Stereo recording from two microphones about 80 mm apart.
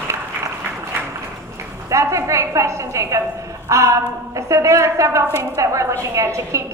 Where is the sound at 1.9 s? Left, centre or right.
Right.